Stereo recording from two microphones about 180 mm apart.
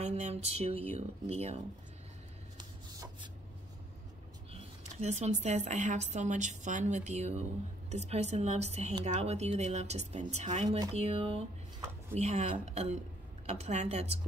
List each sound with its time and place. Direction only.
0.0 s a woman's voice: 35° right (ahead or behind)
2.5 s rub: 25° right (ahead or behind)
5.0 s a woman's voice: 40° right (ahead or behind)